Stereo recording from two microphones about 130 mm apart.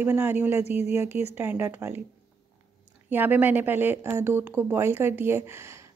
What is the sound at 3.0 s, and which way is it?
A woman's voice, 15° right (ahead or behind).